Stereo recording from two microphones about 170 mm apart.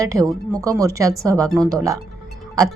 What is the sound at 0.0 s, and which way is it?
Speech, 20° right (ahead or behind).